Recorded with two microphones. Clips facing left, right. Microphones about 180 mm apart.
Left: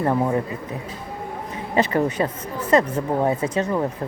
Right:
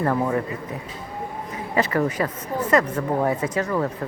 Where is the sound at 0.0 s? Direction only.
20° left (ahead or behind).